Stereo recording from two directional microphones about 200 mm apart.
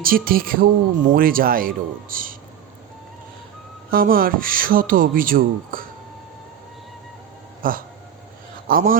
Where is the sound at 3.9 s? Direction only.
45° right (ahead or behind).